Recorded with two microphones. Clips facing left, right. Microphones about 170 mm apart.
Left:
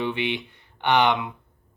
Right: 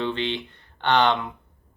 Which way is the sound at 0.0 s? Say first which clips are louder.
Even; 15° left (ahead or behind).